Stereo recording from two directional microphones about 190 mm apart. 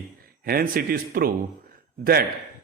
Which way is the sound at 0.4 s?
50° right (ahead or behind).